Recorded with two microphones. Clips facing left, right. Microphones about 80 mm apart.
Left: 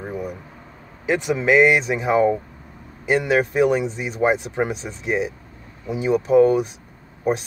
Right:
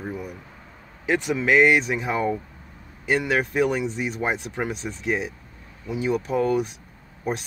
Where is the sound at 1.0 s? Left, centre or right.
Centre.